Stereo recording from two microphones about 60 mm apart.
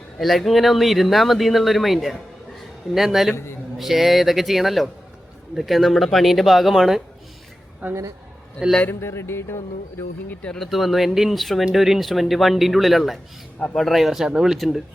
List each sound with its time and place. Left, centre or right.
0.2 s speech: centre
3.3 s a man's voice: left
3.8 s speech: centre
7.8 s speech: right
8.9 s speech: left
10.5 s speech: centre